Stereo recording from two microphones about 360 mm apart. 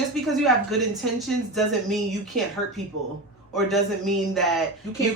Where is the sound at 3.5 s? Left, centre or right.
Centre.